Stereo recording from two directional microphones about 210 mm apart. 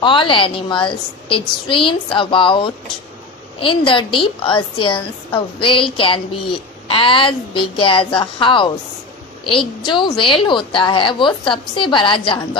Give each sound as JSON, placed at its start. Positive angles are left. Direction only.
{"t": 0.0, "sound": "a woman's voice", "side_deg": 25}